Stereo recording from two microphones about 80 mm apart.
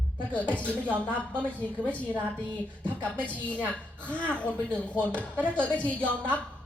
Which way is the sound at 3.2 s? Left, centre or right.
Centre.